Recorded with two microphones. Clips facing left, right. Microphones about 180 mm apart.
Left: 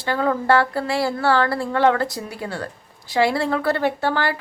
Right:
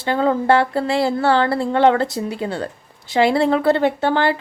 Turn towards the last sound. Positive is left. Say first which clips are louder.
# right 4 dB
turn(degrees=-25)  # may be behind; listen again after turning